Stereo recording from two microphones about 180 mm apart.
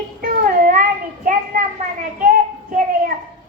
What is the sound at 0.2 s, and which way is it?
Child singing, 50° right (ahead or behind).